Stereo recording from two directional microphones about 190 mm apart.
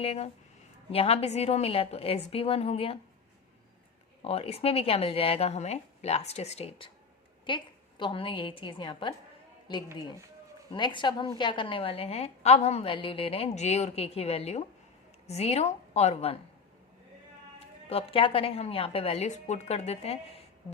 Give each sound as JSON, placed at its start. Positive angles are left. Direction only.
{"t": 0.0, "sound": "a woman's voice", "side_deg": 30}
{"t": 4.2, "sound": "a woman's voice", "side_deg": 30}
{"t": 17.8, "sound": "a woman's voice", "side_deg": 30}